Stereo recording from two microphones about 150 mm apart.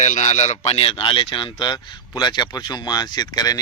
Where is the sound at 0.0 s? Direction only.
55° left (ahead or behind).